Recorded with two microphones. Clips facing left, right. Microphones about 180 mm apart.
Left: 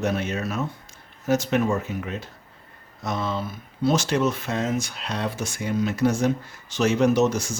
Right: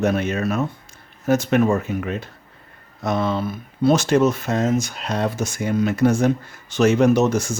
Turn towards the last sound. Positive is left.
turn(degrees=-55)  # may be behind; listen again after turning